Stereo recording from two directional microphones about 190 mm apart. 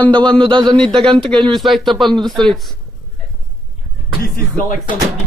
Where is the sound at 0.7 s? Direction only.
5° left (ahead or behind).